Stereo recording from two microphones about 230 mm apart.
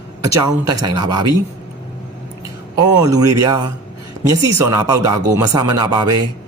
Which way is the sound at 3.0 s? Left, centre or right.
Centre.